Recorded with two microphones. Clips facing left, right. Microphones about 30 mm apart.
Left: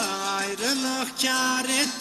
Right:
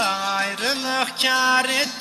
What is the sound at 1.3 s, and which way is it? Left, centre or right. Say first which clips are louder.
Music: right 5 dB; right.